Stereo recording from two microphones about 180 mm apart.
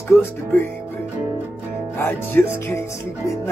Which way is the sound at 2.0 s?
10° left (ahead or behind).